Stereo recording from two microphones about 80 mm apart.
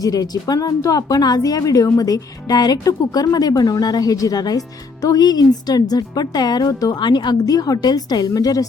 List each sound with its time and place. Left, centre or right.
0.0 s a woman's voice: left